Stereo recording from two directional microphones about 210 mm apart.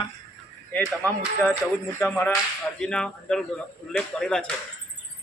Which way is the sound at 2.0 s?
5° left (ahead or behind).